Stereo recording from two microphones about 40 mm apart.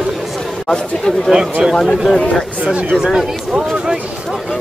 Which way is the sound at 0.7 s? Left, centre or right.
Centre.